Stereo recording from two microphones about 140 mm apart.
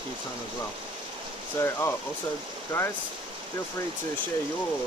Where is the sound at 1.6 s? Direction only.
15° left (ahead or behind).